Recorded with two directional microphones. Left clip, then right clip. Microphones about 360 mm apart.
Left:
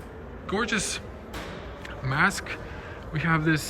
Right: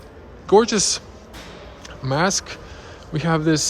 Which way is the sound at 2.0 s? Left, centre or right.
Centre.